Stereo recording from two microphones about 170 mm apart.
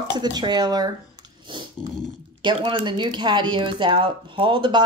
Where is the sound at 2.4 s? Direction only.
30° right (ahead or behind).